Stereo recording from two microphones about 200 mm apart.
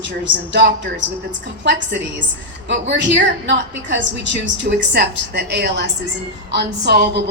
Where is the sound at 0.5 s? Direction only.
60° right (ahead or behind).